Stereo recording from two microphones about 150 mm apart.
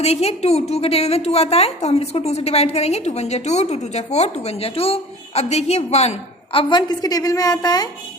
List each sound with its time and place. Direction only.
0.0 s a woman's voice: 45° left (ahead or behind); by 7.9 s 25° left (ahead or behind)